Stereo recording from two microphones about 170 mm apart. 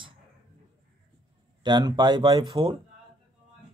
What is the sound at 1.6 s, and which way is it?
Speech, 25° right (ahead or behind).